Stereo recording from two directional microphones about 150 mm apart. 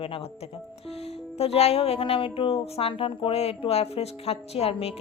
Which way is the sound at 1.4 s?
45° left (ahead or behind).